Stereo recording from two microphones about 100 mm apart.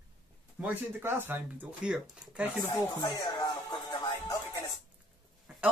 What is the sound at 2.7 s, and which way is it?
Speech, 30° left (ahead or behind).